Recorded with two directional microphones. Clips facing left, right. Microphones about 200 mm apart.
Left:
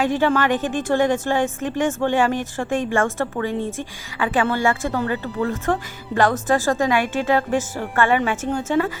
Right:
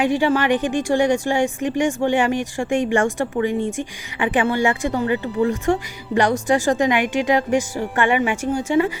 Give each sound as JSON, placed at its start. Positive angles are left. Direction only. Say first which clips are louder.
{"t": 0.0, "sound": "a woman's voice", "louder": "right 1 dB", "side_deg": -15}